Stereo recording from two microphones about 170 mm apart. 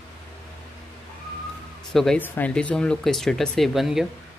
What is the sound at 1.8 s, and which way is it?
Speech, centre (ahead or behind).